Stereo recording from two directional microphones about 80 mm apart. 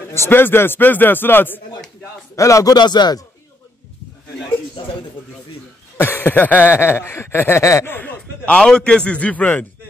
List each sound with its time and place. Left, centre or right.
0.1 s chuckle: left
2.3 s speech: left
2.7 s speech: left
4.8 s speech: left
5.9 s chuckle: left
7.6 s speech: left
7.9 s a man's voice: left